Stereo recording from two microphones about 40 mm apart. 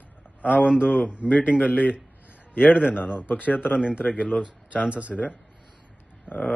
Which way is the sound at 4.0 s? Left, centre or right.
Left.